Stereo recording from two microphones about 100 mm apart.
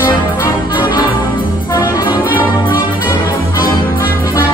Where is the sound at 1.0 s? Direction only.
55° left (ahead or behind).